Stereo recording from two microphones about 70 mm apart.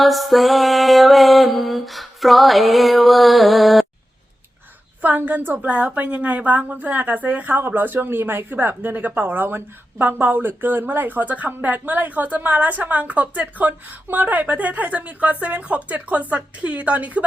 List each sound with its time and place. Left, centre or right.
0.0 s mantra: centre
5.0 s a woman's voice: right